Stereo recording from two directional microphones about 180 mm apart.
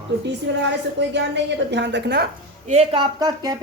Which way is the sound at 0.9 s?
75° right (ahead or behind).